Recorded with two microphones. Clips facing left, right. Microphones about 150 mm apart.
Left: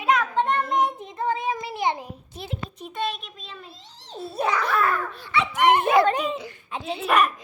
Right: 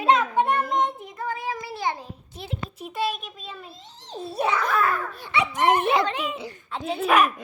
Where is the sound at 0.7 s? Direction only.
5° left (ahead or behind).